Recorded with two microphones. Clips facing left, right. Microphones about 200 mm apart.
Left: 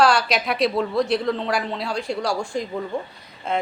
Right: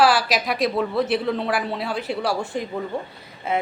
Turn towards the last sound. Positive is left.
turn(degrees=-5)  # may be behind; listen again after turning